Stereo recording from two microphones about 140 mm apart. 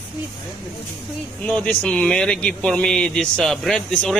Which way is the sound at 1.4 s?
10° left (ahead or behind).